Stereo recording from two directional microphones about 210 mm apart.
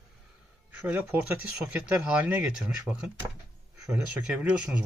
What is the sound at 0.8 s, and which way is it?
Speech, 5° right (ahead or behind).